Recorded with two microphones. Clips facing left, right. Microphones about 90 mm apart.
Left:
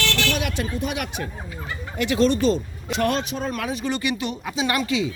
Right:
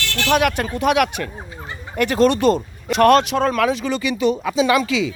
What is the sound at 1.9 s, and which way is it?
Speech, 50° right (ahead or behind).